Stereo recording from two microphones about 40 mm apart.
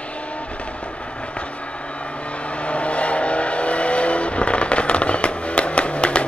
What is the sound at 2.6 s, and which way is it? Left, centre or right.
Vehicle, left.